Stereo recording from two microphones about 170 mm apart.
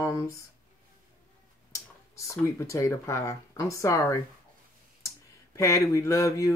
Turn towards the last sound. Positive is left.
turn(degrees=15)  # may be behind; listen again after turning